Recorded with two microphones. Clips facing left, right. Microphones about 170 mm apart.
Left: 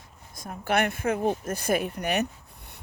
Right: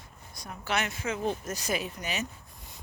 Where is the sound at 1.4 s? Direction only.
55° left (ahead or behind).